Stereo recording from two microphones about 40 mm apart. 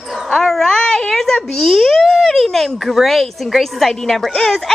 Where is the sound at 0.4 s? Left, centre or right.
Centre.